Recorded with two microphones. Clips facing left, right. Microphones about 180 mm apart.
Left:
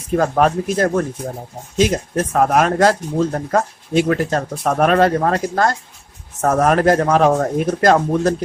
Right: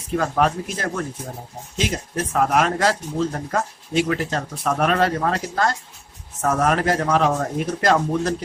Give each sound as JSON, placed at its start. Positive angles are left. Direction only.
{"t": 0.2, "sound": "speech", "side_deg": 45}
{"t": 2.1, "sound": "speech", "side_deg": 45}